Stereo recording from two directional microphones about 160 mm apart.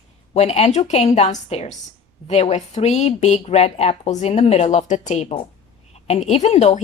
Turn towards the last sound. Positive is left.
turn(degrees=45)  # may be behind; listen again after turning